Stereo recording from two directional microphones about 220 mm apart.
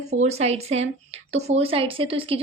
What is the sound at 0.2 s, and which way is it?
Speech, 30° right (ahead or behind).